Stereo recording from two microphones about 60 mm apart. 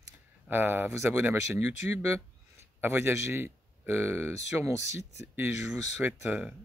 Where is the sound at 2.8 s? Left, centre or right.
Right.